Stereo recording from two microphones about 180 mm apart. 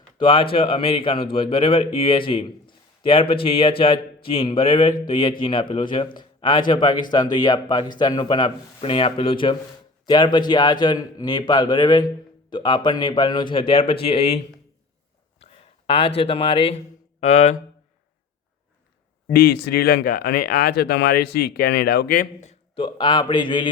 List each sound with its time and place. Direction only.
0.2 s a man's voice: 30° left (ahead or behind)
19.3 s speech: 60° left (ahead or behind)
22.4 s a man's voice: 30° left (ahead or behind)